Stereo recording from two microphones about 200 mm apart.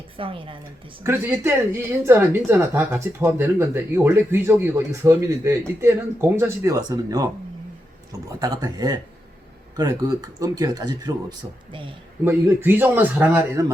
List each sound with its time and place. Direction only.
0.2 s a woman's voice: 25° right (ahead or behind)
1.0 s speech: 10° right (ahead or behind)
12.2 s speech: 10° right (ahead or behind)